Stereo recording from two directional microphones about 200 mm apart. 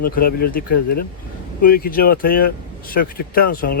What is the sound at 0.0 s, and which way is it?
Speech, 50° left (ahead or behind).